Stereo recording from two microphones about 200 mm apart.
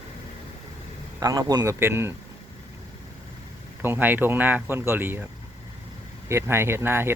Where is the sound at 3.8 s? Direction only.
10° right (ahead or behind).